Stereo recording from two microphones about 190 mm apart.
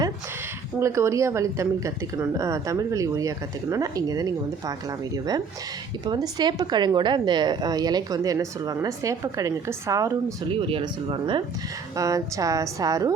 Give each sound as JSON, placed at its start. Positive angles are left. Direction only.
{"t": 0.8, "sound": "a woman's voice", "side_deg": -15}
{"t": 10.5, "sound": "a woman's voice", "side_deg": -30}